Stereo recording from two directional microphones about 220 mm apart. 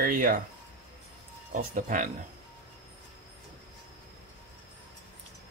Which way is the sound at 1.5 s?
35° right (ahead or behind).